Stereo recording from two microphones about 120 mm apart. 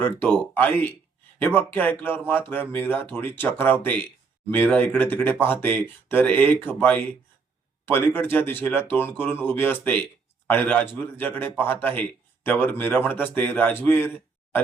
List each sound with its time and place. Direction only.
0.0 s speech: 15° left (ahead or behind)